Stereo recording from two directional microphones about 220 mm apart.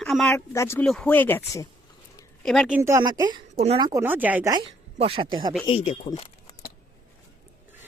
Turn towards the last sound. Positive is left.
turn(degrees=30)  # may be behind; listen again after turning